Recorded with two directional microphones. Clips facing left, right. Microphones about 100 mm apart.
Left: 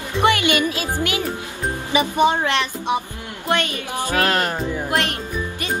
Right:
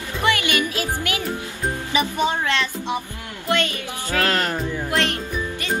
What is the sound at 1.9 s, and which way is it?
Speech, 20° left (ahead or behind).